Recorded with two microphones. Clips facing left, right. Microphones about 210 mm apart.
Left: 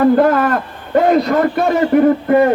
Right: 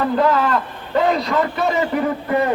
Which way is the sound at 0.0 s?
50° left (ahead or behind).